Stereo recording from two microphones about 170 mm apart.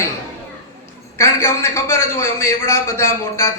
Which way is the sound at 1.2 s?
15° left (ahead or behind).